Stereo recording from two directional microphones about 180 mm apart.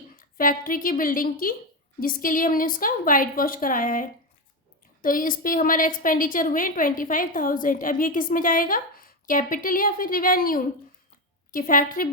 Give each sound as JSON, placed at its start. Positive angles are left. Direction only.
{"t": 0.2, "sound": "a woman's voice", "side_deg": 50}